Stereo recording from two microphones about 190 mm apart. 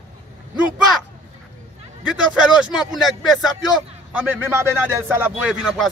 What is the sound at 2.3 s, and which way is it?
Speech, centre (ahead or behind).